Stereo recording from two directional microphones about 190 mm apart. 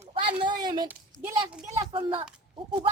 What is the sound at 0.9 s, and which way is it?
Speech, 15° right (ahead or behind).